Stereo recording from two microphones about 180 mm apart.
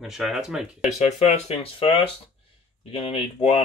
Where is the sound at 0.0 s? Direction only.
Centre (ahead or behind).